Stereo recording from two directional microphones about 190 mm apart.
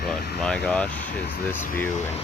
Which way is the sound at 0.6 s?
5° left (ahead or behind).